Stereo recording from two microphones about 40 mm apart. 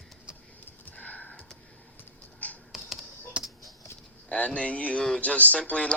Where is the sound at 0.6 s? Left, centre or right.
Left.